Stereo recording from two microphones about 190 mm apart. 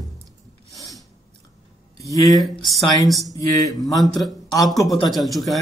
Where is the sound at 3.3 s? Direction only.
20° left (ahead or behind).